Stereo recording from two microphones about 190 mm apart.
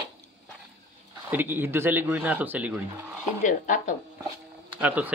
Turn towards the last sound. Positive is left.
turn(degrees=-10)  # may be behind; listen again after turning